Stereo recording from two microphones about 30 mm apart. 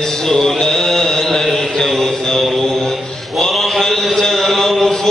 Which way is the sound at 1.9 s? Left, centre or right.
Left.